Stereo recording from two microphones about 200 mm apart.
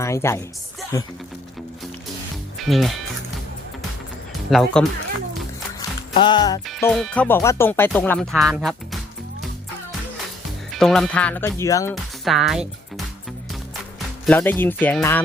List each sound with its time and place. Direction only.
0.0 s a woman's voice: 15° left (ahead or behind)
2.6 s speech: centre (ahead or behind)
4.5 s speech: centre (ahead or behind)
6.1 s music: 25° left (ahead or behind)
6.8 s speech: 5° left (ahead or behind)
10.7 s speech: centre (ahead or behind)
12.2 s speech: centre (ahead or behind)
14.3 s speech: 10° left (ahead or behind)